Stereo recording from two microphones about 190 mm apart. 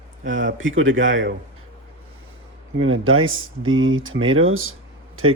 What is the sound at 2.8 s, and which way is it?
Speech, 90° right.